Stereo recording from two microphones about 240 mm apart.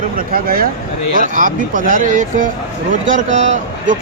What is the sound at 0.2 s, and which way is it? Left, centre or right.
Speech, right.